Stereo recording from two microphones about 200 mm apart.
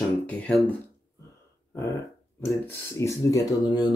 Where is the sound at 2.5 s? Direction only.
15° left (ahead or behind).